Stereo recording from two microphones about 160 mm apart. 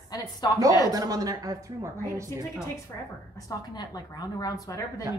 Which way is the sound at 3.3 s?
25° left (ahead or behind).